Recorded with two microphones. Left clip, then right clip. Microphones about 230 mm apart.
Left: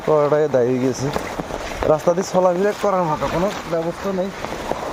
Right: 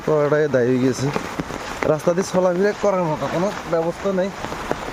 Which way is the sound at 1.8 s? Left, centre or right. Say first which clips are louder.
Left 3 dB; right.